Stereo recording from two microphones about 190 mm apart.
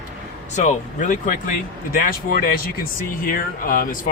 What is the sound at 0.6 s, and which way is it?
Speech, 40° left (ahead or behind).